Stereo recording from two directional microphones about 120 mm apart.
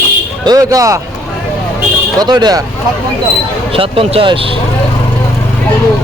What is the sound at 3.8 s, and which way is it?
Speech, 50° right (ahead or behind).